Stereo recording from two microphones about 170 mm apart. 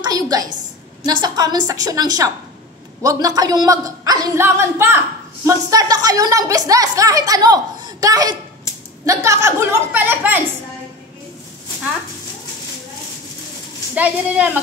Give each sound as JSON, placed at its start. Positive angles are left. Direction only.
{"t": 0.0, "sound": "a woman's voice", "side_deg": -20}
{"t": 13.9, "sound": "a woman's voice", "side_deg": -10}